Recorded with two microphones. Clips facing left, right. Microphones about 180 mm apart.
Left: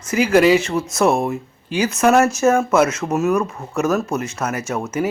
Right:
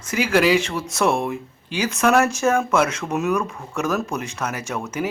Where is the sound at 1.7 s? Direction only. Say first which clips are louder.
Left 3 dB; 5° left (ahead or behind).